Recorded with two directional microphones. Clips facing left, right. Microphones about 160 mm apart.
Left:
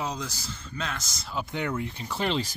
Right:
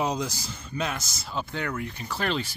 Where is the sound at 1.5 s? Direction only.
20° left (ahead or behind).